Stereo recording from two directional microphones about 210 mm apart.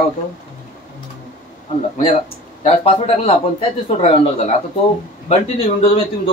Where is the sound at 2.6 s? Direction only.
30° left (ahead or behind).